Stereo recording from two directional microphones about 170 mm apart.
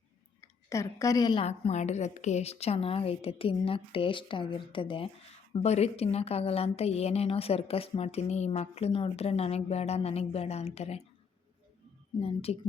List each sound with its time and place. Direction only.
0.4 s a woman's voice: 15° left (ahead or behind)
1.5 s a woman's voice: 40° left (ahead or behind)
12.2 s a woman's voice: 35° left (ahead or behind)